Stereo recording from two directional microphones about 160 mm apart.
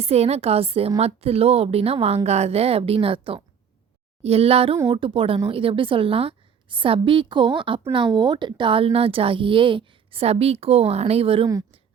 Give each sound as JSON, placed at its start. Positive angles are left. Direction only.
{"t": 0.0, "sound": "a woman's voice", "side_deg": -40}